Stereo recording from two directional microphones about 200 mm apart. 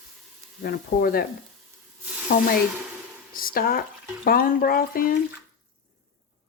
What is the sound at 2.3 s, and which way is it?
Speech, 45° left (ahead or behind).